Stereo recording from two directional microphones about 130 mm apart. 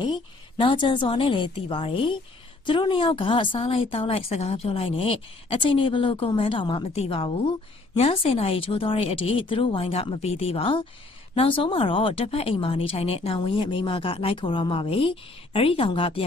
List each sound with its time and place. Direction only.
0.0 s a woman's voice: 35° left (ahead or behind)